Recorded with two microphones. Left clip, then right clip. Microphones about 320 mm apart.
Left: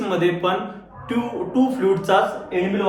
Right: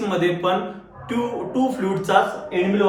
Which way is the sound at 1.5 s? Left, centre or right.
Centre.